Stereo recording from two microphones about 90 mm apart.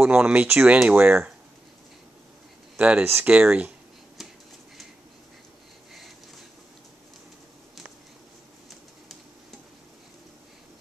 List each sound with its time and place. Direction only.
0.0 s speech: 10° right (ahead or behind)
2.8 s speech: 15° right (ahead or behind)
4.2 s a sound: 5° right (ahead or behind)